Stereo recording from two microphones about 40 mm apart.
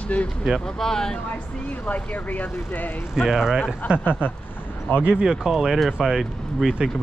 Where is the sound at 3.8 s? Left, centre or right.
Right.